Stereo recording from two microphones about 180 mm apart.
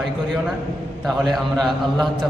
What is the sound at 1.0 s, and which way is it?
A man's voice, centre (ahead or behind).